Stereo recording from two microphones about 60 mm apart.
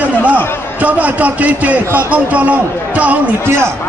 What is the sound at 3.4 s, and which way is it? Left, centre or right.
Speech, right.